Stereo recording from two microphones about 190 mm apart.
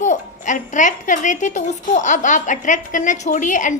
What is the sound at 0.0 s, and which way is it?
A woman's voice, 40° left (ahead or behind).